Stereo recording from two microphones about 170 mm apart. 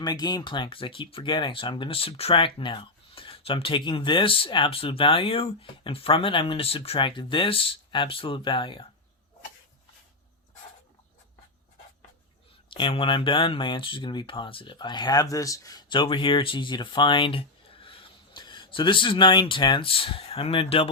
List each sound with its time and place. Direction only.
0.0 s speech: 25° left (ahead or behind)
12.7 s speech: 30° left (ahead or behind)